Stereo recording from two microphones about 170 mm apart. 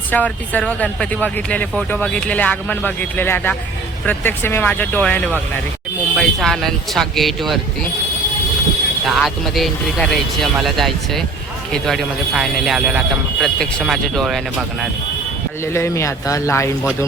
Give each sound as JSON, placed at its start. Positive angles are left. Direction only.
{"t": 0.1, "sound": "speech", "side_deg": 10}
{"t": 9.0, "sound": "speech", "side_deg": 0}
{"t": 15.6, "sound": "speech", "side_deg": 15}